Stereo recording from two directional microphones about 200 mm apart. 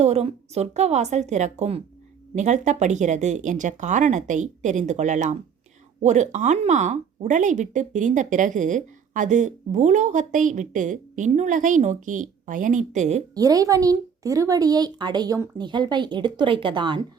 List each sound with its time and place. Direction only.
0.0 s speech: 35° right (ahead or behind)
13.3 s speech: 20° right (ahead or behind)